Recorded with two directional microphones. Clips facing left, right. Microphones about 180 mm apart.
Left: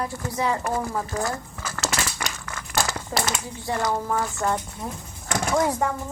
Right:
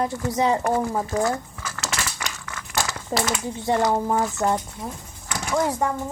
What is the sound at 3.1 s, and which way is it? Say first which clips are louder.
Speech: right 5 dB; 30° right (ahead or behind).